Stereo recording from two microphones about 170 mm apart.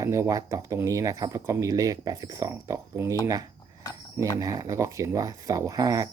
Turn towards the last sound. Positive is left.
turn(degrees=-20)  # may be behind; listen again after turning